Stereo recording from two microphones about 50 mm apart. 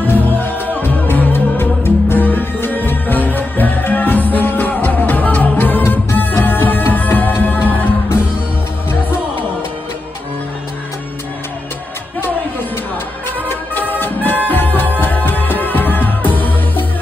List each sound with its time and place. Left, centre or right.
0.0 s music: left
13.5 s music: left